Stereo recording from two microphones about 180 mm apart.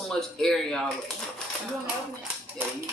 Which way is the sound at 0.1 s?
5° left (ahead or behind).